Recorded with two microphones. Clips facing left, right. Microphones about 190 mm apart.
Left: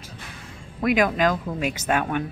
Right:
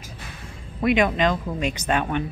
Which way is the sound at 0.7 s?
Centre (ahead or behind).